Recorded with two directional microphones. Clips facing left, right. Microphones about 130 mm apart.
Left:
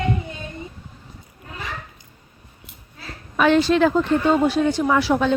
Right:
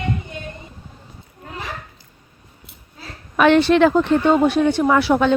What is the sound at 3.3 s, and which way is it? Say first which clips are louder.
Speech: right 3 dB; 65° right (ahead or behind).